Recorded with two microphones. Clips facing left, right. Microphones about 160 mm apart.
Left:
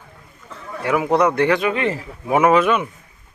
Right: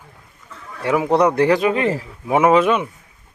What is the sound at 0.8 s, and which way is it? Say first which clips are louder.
A man's voice: right 1 dB; 30° right (ahead or behind).